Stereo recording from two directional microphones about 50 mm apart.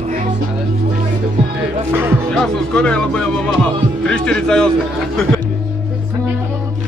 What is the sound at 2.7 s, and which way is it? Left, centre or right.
Music, centre.